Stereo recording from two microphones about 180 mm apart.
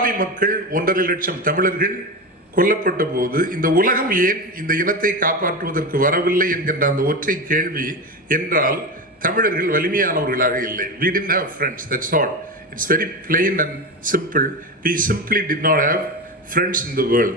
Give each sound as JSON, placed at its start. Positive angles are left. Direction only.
{"t": 0.0, "sound": "a man's voice", "side_deg": -50}